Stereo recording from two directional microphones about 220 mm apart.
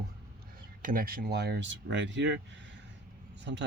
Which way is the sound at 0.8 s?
40° right (ahead or behind).